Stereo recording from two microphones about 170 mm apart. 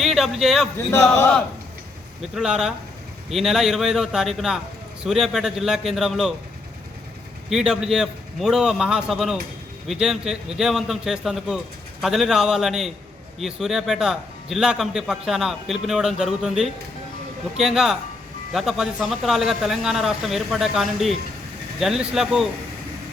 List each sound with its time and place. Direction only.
0.0 s a man's voice: centre (ahead or behind)
0.9 s a man's voice: 15° left (ahead or behind)
2.3 s a man's voice: 5° right (ahead or behind)
7.5 s a man's voice: 5° right (ahead or behind)